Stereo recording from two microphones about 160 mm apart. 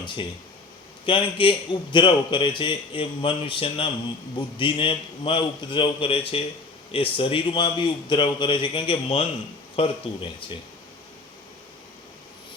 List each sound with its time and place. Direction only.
1.0 s a man's voice: 35° left (ahead or behind)